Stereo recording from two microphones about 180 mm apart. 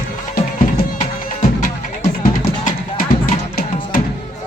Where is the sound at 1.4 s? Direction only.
40° left (ahead or behind).